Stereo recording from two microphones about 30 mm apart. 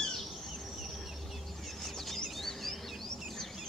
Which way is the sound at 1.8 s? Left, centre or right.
Centre.